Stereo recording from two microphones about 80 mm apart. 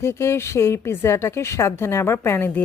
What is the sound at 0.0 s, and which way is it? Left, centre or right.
A woman's voice, left.